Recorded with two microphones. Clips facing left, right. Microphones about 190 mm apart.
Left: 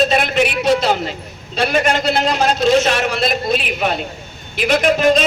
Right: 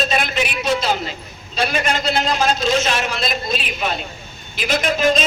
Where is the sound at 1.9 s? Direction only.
65° left (ahead or behind).